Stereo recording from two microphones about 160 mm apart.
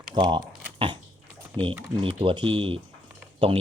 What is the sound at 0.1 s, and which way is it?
Speech, 30° right (ahead or behind).